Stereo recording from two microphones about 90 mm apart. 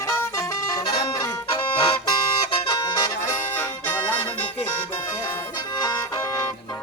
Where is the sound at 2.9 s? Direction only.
40° left (ahead or behind).